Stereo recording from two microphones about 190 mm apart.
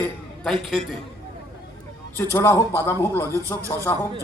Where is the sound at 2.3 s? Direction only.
15° left (ahead or behind).